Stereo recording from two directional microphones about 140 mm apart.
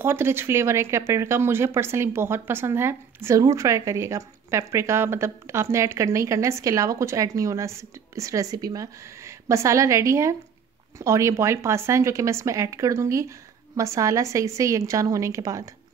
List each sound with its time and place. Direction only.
0.0 s speech: 15° right (ahead or behind)